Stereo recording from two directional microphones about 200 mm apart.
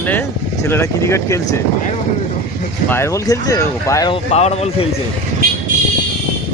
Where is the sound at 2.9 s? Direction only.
15° left (ahead or behind).